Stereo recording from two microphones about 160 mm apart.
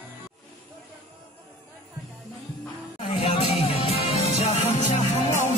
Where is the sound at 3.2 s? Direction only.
40° left (ahead or behind).